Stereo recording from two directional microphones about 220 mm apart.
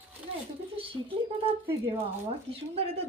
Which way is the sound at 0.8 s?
25° right (ahead or behind).